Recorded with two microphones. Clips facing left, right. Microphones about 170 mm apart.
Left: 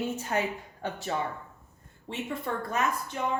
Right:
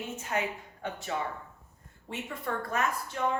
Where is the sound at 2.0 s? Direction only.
25° left (ahead or behind).